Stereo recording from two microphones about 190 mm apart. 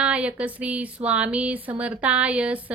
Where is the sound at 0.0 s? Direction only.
5° right (ahead or behind).